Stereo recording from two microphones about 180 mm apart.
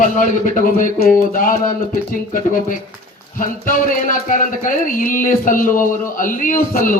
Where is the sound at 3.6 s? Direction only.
45° left (ahead or behind).